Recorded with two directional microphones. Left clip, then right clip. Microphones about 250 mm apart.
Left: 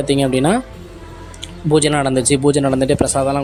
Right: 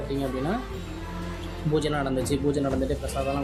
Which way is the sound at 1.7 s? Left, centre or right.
Left.